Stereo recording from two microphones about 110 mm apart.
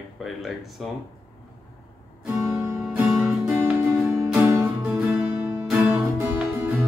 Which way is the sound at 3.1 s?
Centre (ahead or behind).